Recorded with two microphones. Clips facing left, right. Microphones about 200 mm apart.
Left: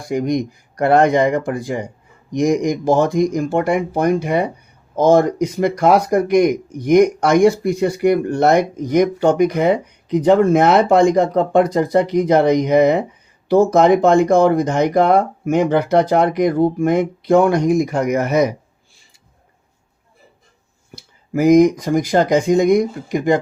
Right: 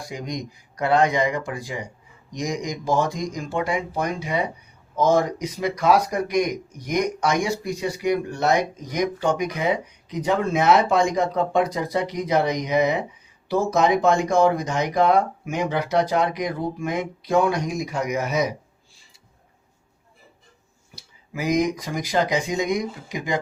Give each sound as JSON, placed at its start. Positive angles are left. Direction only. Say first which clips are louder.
{"t": 0.1, "sound": "speech", "louder": "left 14 dB", "side_deg": 55}
{"t": 20.9, "sound": "speech", "louder": "left 13 dB", "side_deg": 55}